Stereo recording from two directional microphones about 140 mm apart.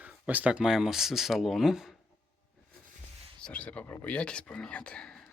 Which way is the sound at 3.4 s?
10° left (ahead or behind).